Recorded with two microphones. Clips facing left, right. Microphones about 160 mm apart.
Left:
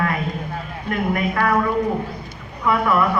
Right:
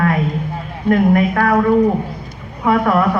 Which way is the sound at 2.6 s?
45° right (ahead or behind).